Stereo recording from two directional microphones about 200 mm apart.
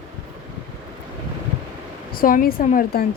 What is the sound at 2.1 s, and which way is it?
Speech, 45° left (ahead or behind).